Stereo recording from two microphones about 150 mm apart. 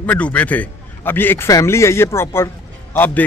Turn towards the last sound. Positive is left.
turn(degrees=10)  # may be behind; listen again after turning